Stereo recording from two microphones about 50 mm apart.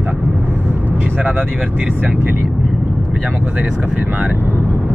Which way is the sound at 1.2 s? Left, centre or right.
Right.